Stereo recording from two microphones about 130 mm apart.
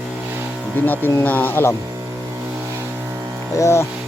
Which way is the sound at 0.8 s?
15° left (ahead or behind).